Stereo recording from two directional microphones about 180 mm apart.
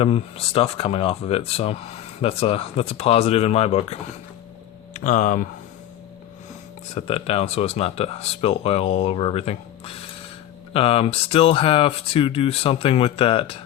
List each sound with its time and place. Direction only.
0.0 s speech: 30° left (ahead or behind)
4.9 s speech: 45° left (ahead or behind)
6.9 s speech: 35° left (ahead or behind)